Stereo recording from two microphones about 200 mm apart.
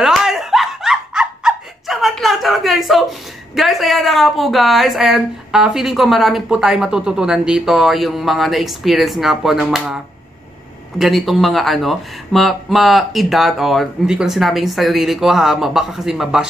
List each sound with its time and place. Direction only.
0.0 s speech: centre (ahead or behind)
11.0 s speech: centre (ahead or behind)